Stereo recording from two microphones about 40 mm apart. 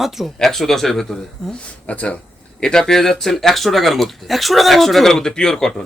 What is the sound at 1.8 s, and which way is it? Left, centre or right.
Speech, left.